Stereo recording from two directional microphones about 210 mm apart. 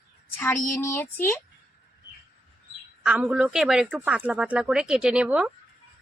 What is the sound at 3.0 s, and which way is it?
Speech, 5° right (ahead or behind).